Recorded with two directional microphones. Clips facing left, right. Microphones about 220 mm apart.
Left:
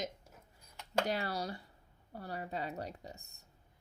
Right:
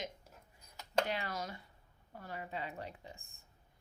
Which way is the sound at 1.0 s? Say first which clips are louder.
Left 4 dB; 35° left (ahead or behind).